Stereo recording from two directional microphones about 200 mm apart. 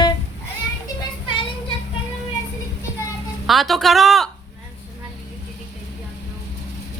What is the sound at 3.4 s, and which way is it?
Speech, centre (ahead or behind).